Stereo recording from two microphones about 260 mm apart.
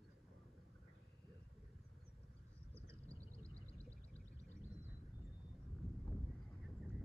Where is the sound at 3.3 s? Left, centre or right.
Centre.